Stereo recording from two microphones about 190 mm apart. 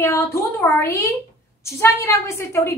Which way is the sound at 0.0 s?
15° left (ahead or behind).